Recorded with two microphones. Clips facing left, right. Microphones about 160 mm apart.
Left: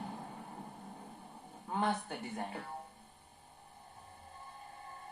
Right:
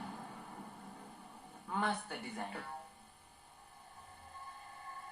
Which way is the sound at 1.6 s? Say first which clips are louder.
Left 2 dB; 35° left (ahead or behind).